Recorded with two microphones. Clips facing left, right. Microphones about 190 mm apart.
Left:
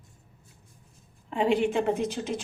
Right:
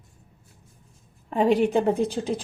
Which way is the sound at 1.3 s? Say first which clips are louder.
Right 4 dB; 40° right (ahead or behind).